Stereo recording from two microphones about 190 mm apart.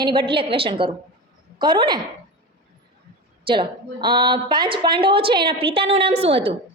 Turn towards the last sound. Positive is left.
turn(degrees=-30)  # may be behind; listen again after turning